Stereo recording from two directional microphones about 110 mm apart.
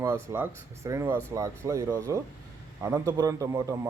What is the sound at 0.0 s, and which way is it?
A man's voice, 20° right (ahead or behind).